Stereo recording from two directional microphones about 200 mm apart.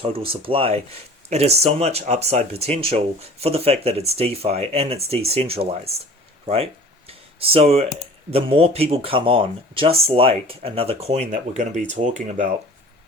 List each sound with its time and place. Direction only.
0.0 s speech: 30° right (ahead or behind)
7.1 s a sound: 30° right (ahead or behind)
8.3 s speech: 30° right (ahead or behind)